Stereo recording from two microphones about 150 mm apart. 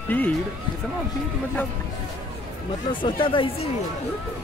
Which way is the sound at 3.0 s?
35° left (ahead or behind).